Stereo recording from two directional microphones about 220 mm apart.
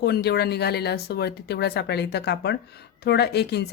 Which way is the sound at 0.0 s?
45° left (ahead or behind).